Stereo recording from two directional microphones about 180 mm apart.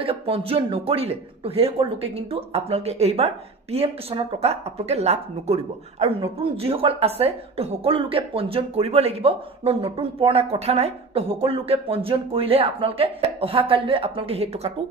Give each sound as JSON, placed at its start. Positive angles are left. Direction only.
{"t": 0.0, "sound": "speech", "side_deg": -30}